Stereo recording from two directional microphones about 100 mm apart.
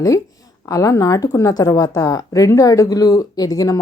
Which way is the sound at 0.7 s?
35° left (ahead or behind).